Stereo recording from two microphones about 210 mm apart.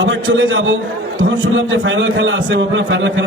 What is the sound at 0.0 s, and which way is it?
A man's voice, 65° right (ahead or behind).